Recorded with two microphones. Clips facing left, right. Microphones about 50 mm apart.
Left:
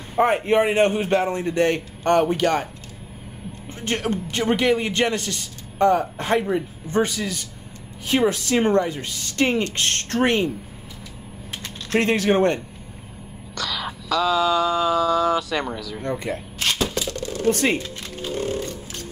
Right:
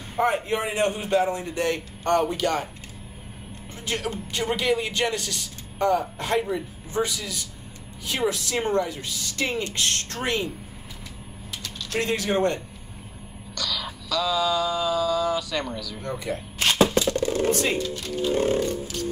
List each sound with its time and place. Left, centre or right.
0.1 s a man's voice: left
3.8 s a man's voice: left
11.5 s mechanisms: left
13.6 s a sound: left
15.3 s a man's voice: left
16.8 s a sound: right
17.5 s a man's voice: left